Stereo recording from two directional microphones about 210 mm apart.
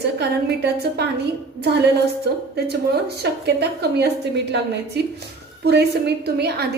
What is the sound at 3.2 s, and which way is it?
A woman's voice, 50° right (ahead or behind).